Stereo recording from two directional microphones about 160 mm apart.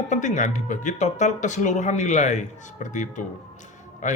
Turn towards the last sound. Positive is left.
turn(degrees=50)  # may be behind; listen again after turning